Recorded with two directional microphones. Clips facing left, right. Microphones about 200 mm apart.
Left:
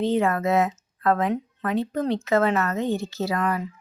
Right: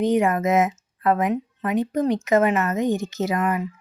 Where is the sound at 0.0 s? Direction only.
15° right (ahead or behind).